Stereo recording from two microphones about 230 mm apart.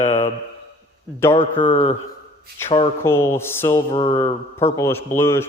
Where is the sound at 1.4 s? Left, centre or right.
Left.